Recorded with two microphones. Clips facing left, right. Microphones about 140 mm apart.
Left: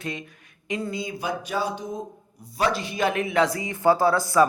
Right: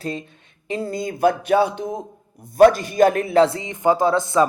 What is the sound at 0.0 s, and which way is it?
Speech, 35° right (ahead or behind).